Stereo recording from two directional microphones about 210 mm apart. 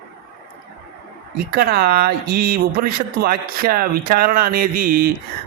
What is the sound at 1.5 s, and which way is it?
Speech, 50° right (ahead or behind).